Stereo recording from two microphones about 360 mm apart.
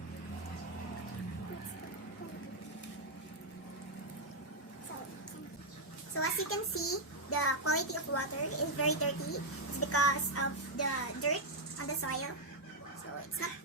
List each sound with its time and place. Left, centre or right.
6.1 s a child's voice: left